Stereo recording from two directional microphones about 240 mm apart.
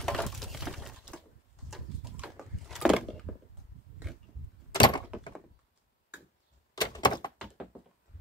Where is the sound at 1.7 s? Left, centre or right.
Centre.